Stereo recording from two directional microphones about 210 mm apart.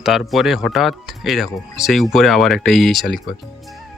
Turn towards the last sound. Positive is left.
turn(degrees=0)  # may be behind; listen again after turning